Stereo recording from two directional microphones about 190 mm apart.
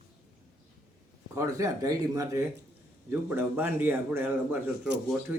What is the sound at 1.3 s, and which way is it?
Speech, 15° right (ahead or behind).